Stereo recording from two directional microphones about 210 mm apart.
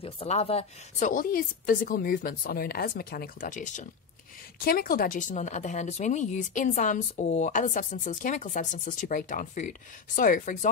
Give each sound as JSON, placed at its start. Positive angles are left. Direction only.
{"t": 0.0, "sound": "a woman's voice", "side_deg": 25}
{"t": 5.3, "sound": "a woman's voice", "side_deg": 35}